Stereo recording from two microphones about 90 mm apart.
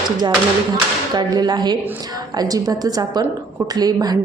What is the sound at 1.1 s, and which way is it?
Speech, 50° right (ahead or behind).